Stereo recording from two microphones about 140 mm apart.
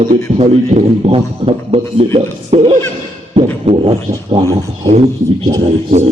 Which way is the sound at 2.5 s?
55° right (ahead or behind).